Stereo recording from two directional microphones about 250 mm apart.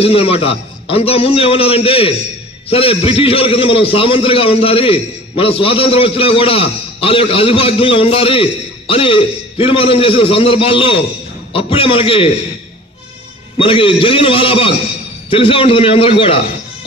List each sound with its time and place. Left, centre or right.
0.0 s a man's voice: left
13.6 s a man's voice: left